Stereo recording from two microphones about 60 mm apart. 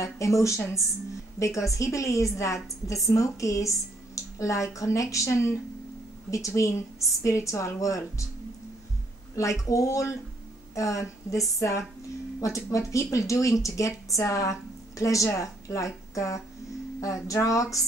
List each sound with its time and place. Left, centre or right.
0.0 s speech: left
9.3 s speech: left